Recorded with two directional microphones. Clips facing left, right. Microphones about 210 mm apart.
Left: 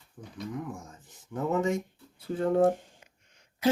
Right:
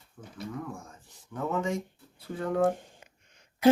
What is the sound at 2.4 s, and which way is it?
Speech, 30° left (ahead or behind).